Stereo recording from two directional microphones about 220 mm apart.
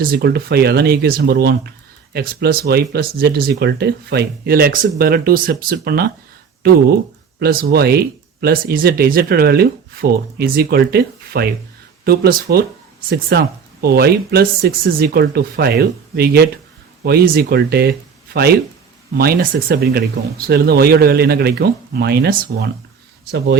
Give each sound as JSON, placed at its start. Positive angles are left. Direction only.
{"t": 0.0, "sound": "speech", "side_deg": -45}
{"t": 7.3, "sound": "speech", "side_deg": -45}
{"t": 19.1, "sound": "speech", "side_deg": -40}